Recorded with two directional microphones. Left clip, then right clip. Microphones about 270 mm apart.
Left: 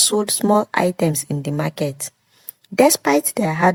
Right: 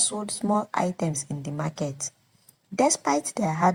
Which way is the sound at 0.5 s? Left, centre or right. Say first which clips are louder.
Left 7 dB; left.